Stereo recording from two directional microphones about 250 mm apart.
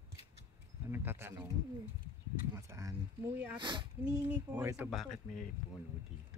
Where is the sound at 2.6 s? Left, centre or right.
Centre.